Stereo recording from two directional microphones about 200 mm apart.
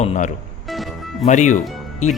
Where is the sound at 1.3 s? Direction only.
35° left (ahead or behind).